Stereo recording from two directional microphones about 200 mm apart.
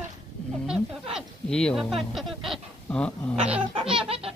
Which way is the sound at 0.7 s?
5° right (ahead or behind).